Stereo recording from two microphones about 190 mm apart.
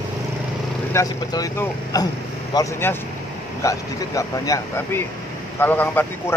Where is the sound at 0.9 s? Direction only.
15° left (ahead or behind).